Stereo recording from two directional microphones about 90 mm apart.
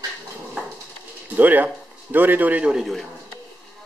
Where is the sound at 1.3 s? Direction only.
20° right (ahead or behind).